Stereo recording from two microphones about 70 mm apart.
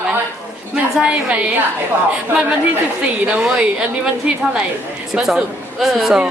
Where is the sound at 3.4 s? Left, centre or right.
Centre.